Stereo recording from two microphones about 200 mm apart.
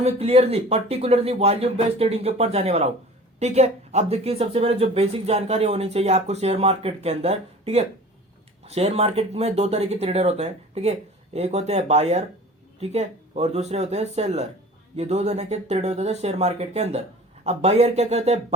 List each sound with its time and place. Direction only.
0.0 s speech: 30° right (ahead or behind)